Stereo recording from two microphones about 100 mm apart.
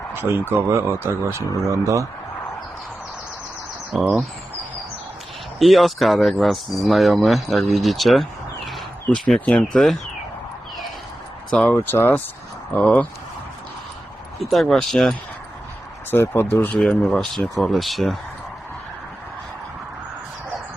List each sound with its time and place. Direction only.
0.1 s speech: 25° right (ahead or behind)
5.5 s speech: centre (ahead or behind)
11.5 s speech: 15° left (ahead or behind)
14.3 s speech: centre (ahead or behind)
16.1 s speech: 25° left (ahead or behind)
16.7 s speech: 5° left (ahead or behind)